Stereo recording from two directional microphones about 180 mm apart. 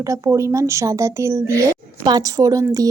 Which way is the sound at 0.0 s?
15° right (ahead or behind).